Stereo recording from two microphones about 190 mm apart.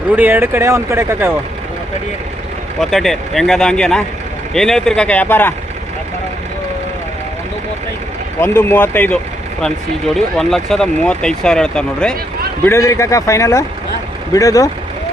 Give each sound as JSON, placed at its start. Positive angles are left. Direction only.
{"t": 0.2, "sound": "speech", "side_deg": -10}
{"t": 2.8, "sound": "speech", "side_deg": 0}
{"t": 8.4, "sound": "speech", "side_deg": 10}
{"t": 10.2, "sound": "speech", "side_deg": 0}
{"t": 12.6, "sound": "speech", "side_deg": 15}